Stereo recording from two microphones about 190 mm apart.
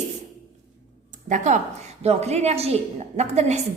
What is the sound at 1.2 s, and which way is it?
A woman's voice, 40° right (ahead or behind).